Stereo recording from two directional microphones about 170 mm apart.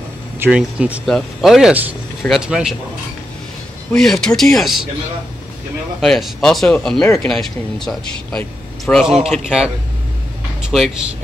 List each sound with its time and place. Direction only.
0.4 s speech: 5° right (ahead or behind)
3.9 s speech: 5° left (ahead or behind)
5.9 s speech: centre (ahead or behind)
10.7 s speech: centre (ahead or behind)